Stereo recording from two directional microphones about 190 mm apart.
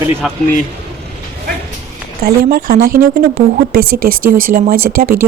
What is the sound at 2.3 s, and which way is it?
Speech, 50° right (ahead or behind).